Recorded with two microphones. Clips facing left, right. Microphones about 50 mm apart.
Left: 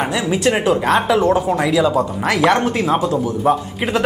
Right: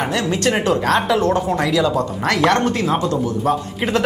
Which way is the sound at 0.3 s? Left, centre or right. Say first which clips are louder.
Left 3 dB; centre.